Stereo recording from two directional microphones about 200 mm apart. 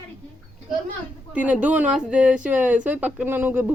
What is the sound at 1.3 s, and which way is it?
Speech, 5° right (ahead or behind).